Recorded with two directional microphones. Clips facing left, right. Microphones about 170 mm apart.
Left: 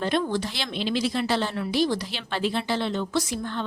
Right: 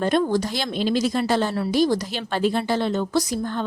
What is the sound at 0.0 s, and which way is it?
A woman's voice, 45° right (ahead or behind).